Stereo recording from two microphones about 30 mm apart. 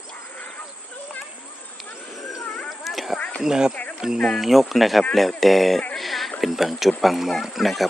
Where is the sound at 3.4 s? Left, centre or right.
Right.